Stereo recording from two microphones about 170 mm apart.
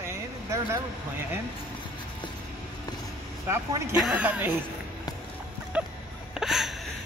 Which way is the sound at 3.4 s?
15° right (ahead or behind).